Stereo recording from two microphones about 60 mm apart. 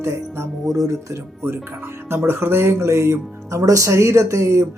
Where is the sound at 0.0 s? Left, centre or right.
Right.